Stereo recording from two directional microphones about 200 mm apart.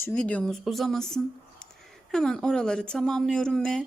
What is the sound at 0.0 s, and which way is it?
Speech, 5° left (ahead or behind).